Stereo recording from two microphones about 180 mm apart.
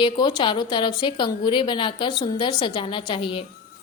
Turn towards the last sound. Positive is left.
turn(degrees=30)  # may be behind; listen again after turning